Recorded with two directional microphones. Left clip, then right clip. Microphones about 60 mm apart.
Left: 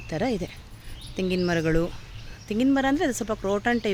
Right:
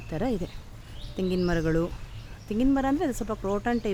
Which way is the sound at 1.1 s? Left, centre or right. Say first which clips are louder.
Left 2 dB; centre.